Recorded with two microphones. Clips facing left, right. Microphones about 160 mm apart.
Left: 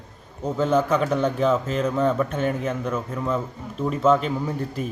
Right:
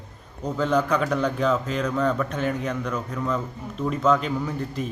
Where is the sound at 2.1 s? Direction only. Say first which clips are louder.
Left 3 dB; 10° left (ahead or behind).